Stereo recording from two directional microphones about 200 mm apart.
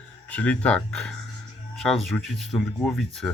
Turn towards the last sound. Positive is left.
turn(degrees=0)  # may be behind; listen again after turning